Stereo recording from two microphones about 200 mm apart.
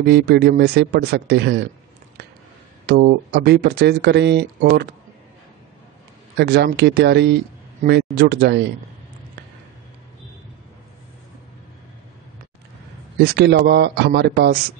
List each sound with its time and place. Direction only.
0.0 s speech: 55° right (ahead or behind)
2.9 s speech: 50° right (ahead or behind)
6.3 s speech: 55° right (ahead or behind)
13.2 s speech: 55° right (ahead or behind)